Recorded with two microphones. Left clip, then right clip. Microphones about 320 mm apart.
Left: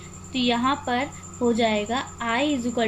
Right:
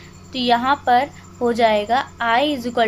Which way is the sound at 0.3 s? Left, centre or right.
Centre.